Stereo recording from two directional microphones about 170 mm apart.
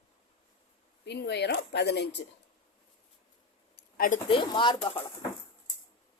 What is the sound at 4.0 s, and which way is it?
Speech, 50° left (ahead or behind).